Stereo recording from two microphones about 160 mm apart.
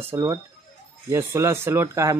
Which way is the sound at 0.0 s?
15° right (ahead or behind).